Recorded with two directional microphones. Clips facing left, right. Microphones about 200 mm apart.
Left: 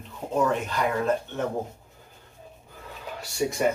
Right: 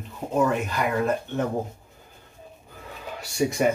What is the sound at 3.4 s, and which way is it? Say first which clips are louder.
Speech: right 3 dB; 20° right (ahead or behind).